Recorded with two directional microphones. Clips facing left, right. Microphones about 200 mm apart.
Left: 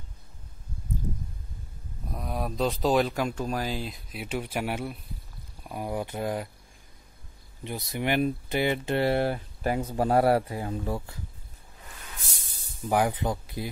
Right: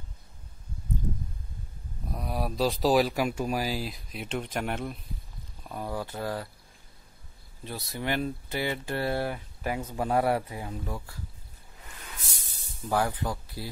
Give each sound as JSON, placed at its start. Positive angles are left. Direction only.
{"t": 2.0, "sound": "speech", "side_deg": 0}
{"t": 7.6, "sound": "speech", "side_deg": 20}
{"t": 12.8, "sound": "speech", "side_deg": 15}